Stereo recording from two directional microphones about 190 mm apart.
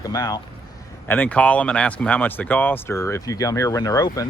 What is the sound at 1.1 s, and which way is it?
Speech, 5° left (ahead or behind).